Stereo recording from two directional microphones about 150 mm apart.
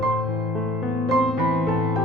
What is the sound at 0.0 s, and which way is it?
Music, centre (ahead or behind).